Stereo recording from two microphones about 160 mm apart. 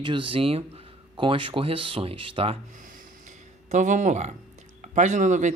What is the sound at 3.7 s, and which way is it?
Speech, 50° right (ahead or behind).